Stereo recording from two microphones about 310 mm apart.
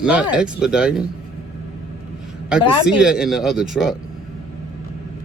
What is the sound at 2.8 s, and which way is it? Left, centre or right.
A man's voice, centre.